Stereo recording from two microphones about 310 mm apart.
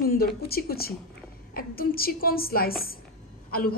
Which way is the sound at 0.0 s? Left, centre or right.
Left.